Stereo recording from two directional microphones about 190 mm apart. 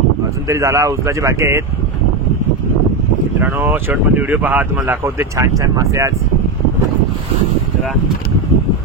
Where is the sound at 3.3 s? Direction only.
10° right (ahead or behind).